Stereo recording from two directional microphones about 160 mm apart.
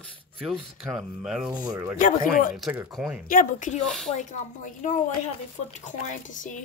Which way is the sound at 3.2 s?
55° left (ahead or behind).